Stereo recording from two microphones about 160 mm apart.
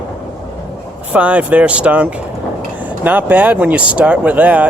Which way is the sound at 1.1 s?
10° right (ahead or behind).